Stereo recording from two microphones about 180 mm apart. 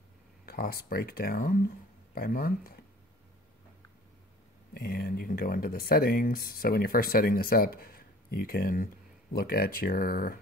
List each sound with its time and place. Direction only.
0.5 s speech: 55° left (ahead or behind)
4.7 s speech: 60° left (ahead or behind)